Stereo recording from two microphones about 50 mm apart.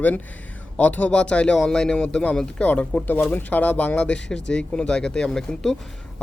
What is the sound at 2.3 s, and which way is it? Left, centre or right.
Speech, left.